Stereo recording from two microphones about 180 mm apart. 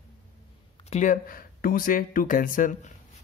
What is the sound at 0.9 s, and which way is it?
Speech, 45° left (ahead or behind).